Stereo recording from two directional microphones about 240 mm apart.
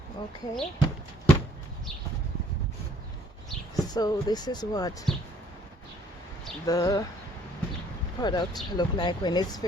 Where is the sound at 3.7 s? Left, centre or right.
Centre.